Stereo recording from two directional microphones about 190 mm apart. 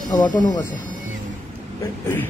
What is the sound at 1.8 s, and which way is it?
Speech, 10° left (ahead or behind).